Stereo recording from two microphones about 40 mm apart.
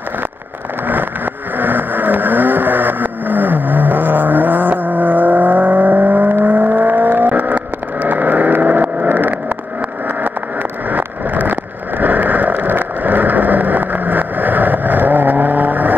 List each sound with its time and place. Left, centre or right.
0.8 s vehicle: right
10.9 s vehicle: right